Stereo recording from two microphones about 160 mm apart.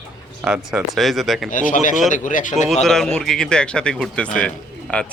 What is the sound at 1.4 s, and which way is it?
Speech, 55° left (ahead or behind).